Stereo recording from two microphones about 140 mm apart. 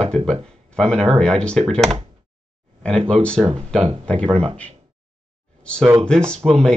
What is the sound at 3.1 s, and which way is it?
Speech, 5° left (ahead or behind).